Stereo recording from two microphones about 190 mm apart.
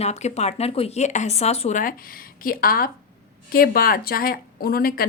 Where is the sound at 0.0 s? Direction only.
35° left (ahead or behind).